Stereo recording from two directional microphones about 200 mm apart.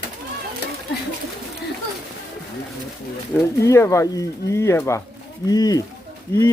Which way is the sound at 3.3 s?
10° left (ahead or behind).